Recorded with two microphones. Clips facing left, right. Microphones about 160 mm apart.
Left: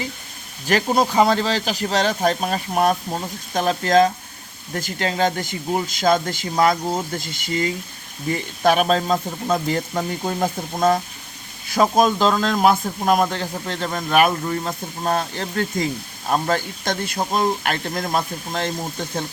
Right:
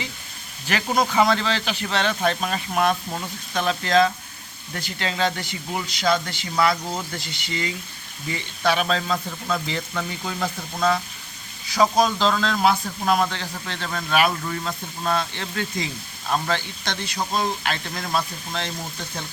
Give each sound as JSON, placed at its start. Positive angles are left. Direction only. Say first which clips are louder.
{"t": 0.7, "sound": "speech", "louder": "left 4 dB", "side_deg": 40}
{"t": 14.3, "sound": "speech", "louder": "left 4 dB", "side_deg": 35}